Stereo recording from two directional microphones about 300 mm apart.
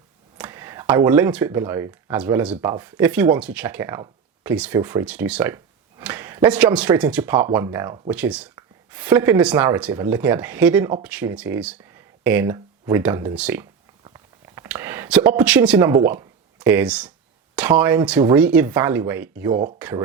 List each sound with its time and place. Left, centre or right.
0.3 s speech: centre